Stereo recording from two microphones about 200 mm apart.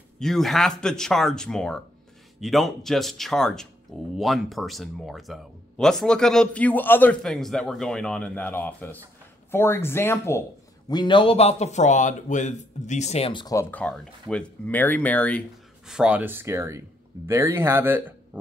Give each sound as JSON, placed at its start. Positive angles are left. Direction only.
{"t": 0.2, "sound": "speech", "side_deg": 0}
{"t": 15.9, "sound": "speech", "side_deg": -5}